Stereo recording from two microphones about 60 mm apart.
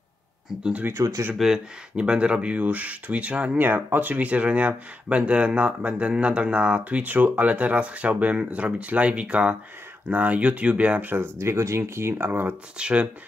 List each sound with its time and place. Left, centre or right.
0.9 s speech: right
2.0 s speech: centre
3.6 s speech: right
11.3 s speech: right
12.7 s speech: centre